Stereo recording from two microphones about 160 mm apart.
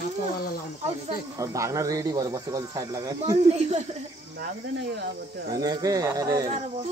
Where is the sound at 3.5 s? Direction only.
40° right (ahead or behind).